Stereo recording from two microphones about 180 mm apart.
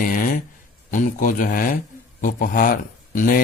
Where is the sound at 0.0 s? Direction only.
50° left (ahead or behind).